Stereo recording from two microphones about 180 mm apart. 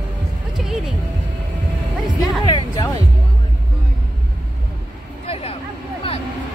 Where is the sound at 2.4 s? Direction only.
25° left (ahead or behind).